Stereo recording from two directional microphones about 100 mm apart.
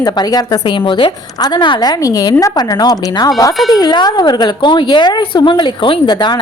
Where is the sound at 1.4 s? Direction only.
50° left (ahead or behind).